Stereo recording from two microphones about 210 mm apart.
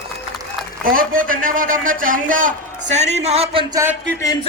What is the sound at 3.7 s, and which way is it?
Speech, 10° right (ahead or behind).